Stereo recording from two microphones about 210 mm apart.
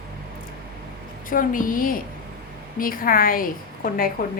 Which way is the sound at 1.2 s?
40° left (ahead or behind).